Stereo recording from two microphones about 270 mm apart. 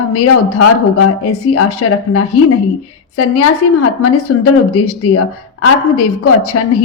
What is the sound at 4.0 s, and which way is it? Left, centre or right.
Speech, left.